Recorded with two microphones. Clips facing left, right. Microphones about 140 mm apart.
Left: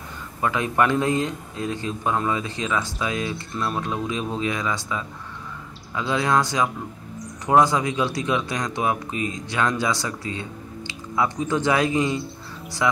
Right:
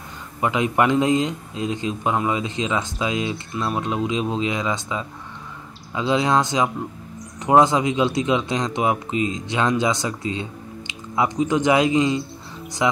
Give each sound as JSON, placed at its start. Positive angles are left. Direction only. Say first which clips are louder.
{"t": 0.4, "sound": "speech", "louder": "right 2 dB", "side_deg": -20}